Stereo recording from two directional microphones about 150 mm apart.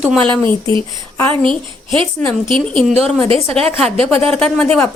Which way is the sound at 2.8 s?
40° right (ahead or behind).